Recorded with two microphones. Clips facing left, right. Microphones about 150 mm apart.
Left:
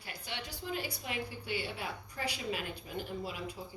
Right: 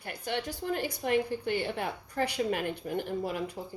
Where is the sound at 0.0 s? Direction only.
50° right (ahead or behind).